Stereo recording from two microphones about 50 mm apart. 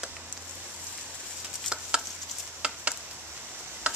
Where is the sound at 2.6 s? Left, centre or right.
Right.